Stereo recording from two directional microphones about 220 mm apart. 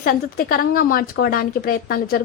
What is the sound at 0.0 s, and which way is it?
A woman's voice, 40° left (ahead or behind).